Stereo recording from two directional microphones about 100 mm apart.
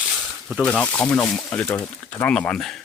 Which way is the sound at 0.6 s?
10° left (ahead or behind).